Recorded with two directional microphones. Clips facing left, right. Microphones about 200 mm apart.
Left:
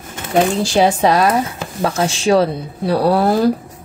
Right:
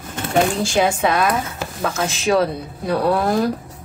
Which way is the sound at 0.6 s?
35° left (ahead or behind).